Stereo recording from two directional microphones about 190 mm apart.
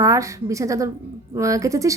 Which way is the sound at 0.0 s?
15° right (ahead or behind).